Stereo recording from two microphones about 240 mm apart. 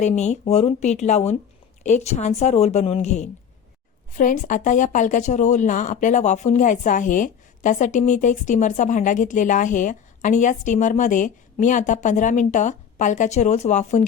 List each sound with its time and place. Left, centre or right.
0.0 s speech: left